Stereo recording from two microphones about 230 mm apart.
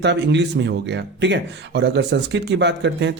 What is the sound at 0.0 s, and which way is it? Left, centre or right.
Speech, right.